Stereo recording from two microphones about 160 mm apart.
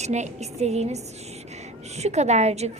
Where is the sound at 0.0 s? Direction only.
45° right (ahead or behind).